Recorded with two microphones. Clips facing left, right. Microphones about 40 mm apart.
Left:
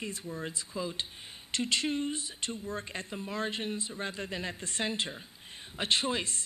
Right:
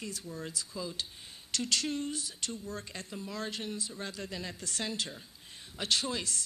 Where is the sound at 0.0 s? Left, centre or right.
Left.